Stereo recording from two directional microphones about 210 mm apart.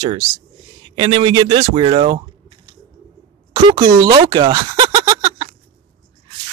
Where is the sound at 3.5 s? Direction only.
25° right (ahead or behind).